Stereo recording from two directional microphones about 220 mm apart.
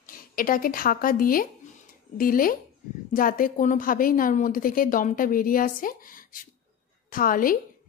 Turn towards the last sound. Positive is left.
turn(degrees=40)  # may be behind; listen again after turning